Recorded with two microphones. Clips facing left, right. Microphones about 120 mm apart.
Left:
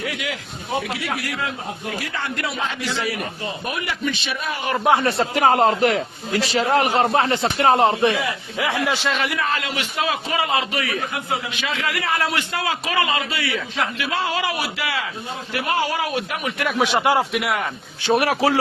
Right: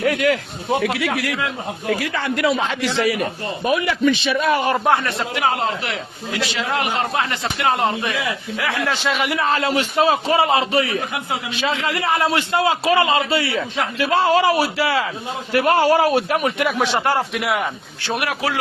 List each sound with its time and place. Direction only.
0.0 s a man's voice: 55° right (ahead or behind)
0.8 s a man's voice: 80° right
4.4 s a man's voice: 90° right
5.0 s a man's voice: 35° left (ahead or behind)
8.5 s a man's voice: 20° left (ahead or behind)
9.0 s a man's voice: 5° right (ahead or behind)
9.2 s a man's voice: 25° right (ahead or behind)
16.6 s a man's voice: centre (ahead or behind)
16.9 s a man's voice: 10° left (ahead or behind)
17.3 s a man's voice: centre (ahead or behind)
18.1 s a man's voice: 35° left (ahead or behind)